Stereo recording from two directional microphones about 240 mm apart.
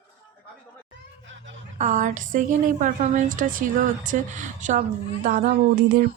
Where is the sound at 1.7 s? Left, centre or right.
Right.